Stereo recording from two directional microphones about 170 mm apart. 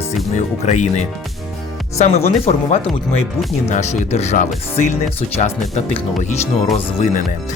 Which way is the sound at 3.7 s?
45° left (ahead or behind).